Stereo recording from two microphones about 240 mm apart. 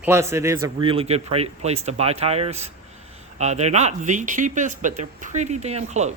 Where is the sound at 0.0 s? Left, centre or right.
Centre.